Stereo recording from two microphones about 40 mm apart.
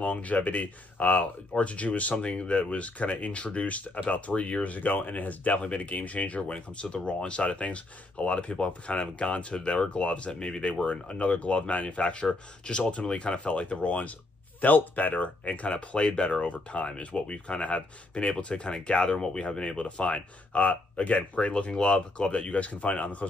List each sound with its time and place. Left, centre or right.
0.0 s speech: left
6.5 s speech: left